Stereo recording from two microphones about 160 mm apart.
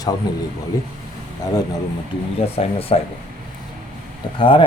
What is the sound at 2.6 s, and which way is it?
Speech, 40° left (ahead or behind).